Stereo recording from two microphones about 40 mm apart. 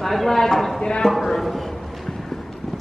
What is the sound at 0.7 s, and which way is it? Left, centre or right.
Speech, left.